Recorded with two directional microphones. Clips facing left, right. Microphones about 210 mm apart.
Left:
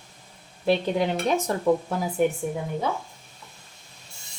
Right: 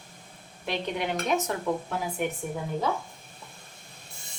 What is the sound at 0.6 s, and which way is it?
Speech, 35° left (ahead or behind).